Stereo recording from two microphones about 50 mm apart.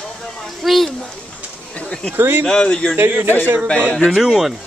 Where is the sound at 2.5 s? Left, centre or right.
Centre.